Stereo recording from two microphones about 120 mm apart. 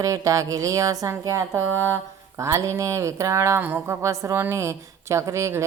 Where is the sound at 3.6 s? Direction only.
15° right (ahead or behind).